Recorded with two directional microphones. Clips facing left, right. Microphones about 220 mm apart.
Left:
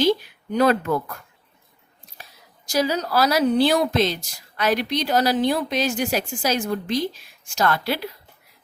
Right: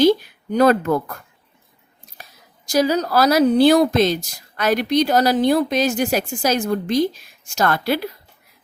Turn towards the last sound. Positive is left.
turn(degrees=-50)  # may be behind; listen again after turning